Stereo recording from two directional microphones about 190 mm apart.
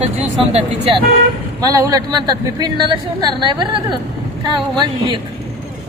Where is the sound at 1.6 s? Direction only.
20° right (ahead or behind).